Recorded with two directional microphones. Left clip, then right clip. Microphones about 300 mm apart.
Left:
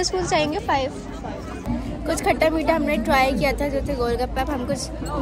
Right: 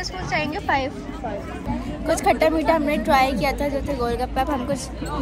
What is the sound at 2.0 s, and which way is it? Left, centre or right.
A woman's voice, centre.